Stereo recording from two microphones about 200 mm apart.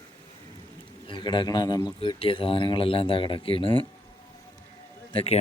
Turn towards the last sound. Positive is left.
turn(degrees=30)  # may be behind; listen again after turning